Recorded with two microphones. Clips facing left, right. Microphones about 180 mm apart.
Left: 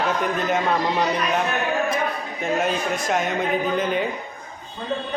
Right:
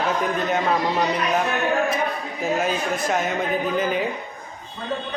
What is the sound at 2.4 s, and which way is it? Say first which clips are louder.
Speech: even; centre (ahead or behind).